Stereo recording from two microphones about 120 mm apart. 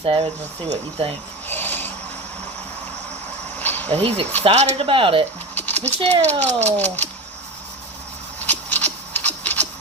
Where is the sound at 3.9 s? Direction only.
55° right (ahead or behind).